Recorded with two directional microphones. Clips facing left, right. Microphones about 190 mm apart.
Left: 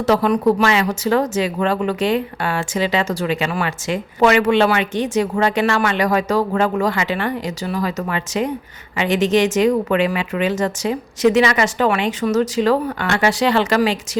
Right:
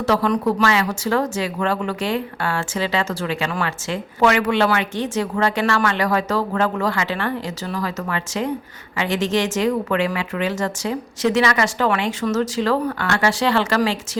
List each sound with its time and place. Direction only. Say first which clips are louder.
0.0 s speech: left 3 dB; 20° left (ahead or behind)